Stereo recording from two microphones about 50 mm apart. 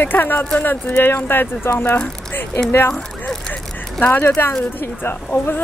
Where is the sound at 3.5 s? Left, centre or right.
Left.